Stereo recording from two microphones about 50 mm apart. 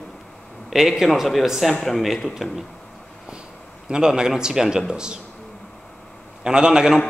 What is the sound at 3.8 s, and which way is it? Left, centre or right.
Speech, centre.